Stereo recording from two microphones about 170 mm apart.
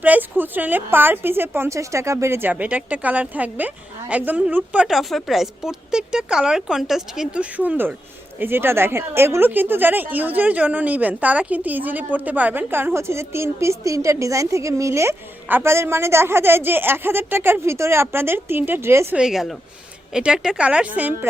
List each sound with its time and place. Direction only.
0.0 s a woman's voice: 10° right (ahead or behind)
19.2 s a woman's voice: centre (ahead or behind)